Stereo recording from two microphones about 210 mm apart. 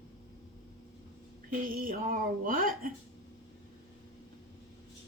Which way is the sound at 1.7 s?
45° right (ahead or behind).